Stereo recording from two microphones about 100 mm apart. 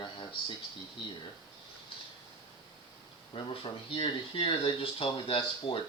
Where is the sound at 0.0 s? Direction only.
55° left (ahead or behind).